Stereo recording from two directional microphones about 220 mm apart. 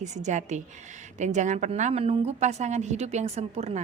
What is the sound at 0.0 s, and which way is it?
A woman's voice, 30° right (ahead or behind).